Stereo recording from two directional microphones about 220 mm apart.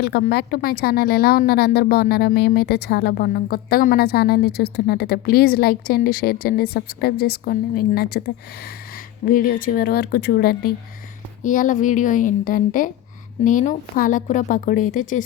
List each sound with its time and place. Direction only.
0.0 s a woman's voice: 45° left (ahead or behind)
9.2 s a woman's voice: 40° left (ahead or behind)